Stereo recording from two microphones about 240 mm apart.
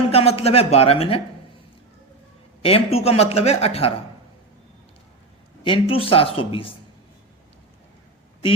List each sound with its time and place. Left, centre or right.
0.1 s speech: left
2.6 s speech: left
5.6 s speech: left